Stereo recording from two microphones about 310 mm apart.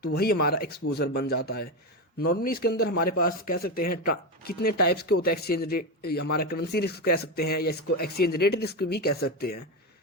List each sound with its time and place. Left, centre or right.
0.0 s a man's voice: left
8.2 s speech: left
8.4 s speech: left